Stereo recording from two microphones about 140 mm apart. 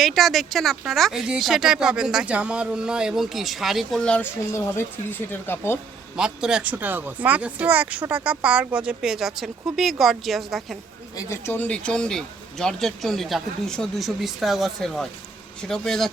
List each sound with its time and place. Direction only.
0.0 s speech: centre (ahead or behind)
4.5 s speech: 20° left (ahead or behind)
6.1 s speech: 5° right (ahead or behind)
11.2 s speech: 20° left (ahead or behind); by 16.1 s centre (ahead or behind)